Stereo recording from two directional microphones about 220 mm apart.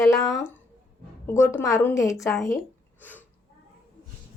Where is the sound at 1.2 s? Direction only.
10° left (ahead or behind).